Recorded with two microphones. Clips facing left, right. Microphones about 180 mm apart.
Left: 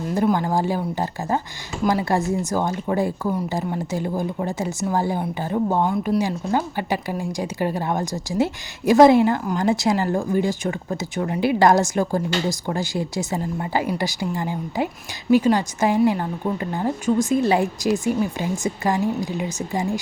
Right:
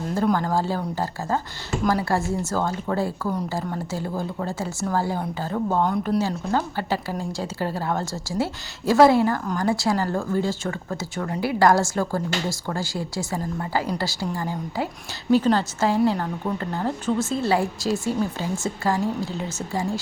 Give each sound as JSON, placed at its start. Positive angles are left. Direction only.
{"t": 0.3, "sound": "speech", "side_deg": 15}